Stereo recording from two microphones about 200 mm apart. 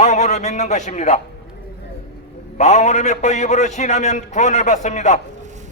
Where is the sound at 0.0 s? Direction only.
35° left (ahead or behind).